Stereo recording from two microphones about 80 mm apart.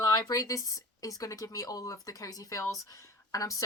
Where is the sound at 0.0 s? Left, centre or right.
Left.